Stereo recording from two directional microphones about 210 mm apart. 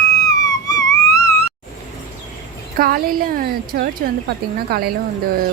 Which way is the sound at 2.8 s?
45° right (ahead or behind).